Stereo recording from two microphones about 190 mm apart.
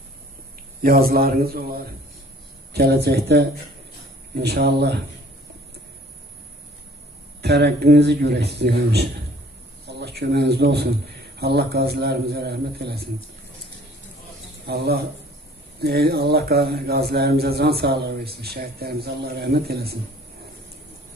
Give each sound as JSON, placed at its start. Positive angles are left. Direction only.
{"t": 0.8, "sound": "a man's voice", "side_deg": -50}
{"t": 7.4, "sound": "a man's voice", "side_deg": -60}
{"t": 14.7, "sound": "speech", "side_deg": -55}